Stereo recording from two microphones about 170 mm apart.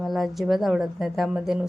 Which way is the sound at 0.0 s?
Centre (ahead or behind).